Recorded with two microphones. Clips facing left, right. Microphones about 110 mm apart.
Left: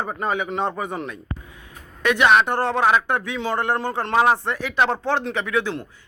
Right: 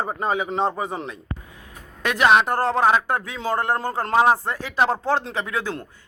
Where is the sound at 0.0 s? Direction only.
30° right (ahead or behind).